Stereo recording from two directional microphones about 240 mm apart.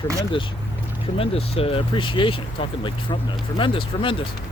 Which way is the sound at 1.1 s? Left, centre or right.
Left.